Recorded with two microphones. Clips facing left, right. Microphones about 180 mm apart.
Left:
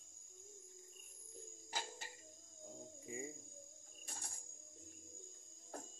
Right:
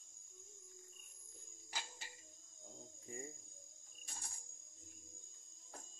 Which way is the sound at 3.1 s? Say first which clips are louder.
Left 3 dB; 5° left (ahead or behind).